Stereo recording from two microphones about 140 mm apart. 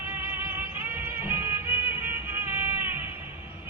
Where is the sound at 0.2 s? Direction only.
15° right (ahead or behind).